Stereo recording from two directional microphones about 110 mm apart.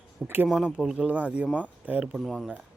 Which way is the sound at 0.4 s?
5° right (ahead or behind).